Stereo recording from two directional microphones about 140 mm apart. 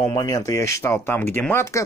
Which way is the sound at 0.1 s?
25° left (ahead or behind).